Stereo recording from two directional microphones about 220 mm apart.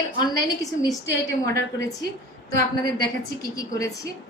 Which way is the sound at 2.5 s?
40° right (ahead or behind).